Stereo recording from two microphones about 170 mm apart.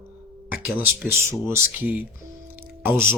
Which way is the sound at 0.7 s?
10° right (ahead or behind).